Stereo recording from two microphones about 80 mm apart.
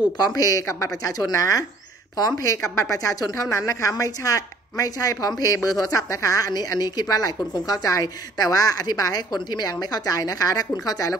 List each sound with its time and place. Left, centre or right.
0.2 s a woman's voice: left